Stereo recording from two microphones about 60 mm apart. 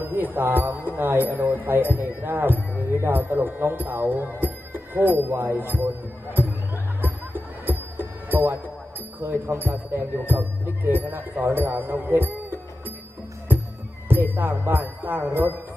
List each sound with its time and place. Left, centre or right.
0.0 s speech: right
6.3 s music: right
9.2 s speech: right
14.0 s speech: right